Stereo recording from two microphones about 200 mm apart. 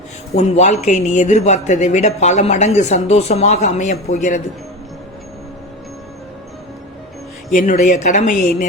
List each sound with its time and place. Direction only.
0.3 s speech: 35° left (ahead or behind)
7.5 s speech: 40° left (ahead or behind)